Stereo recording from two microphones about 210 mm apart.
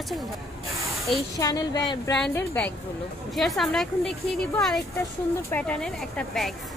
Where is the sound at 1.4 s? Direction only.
15° left (ahead or behind).